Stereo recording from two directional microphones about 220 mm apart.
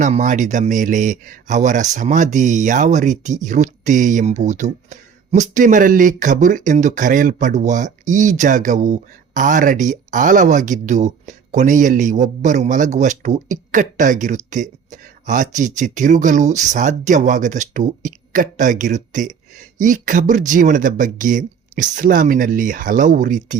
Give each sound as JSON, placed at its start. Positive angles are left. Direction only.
{"t": 0.0, "sound": "speech", "side_deg": -35}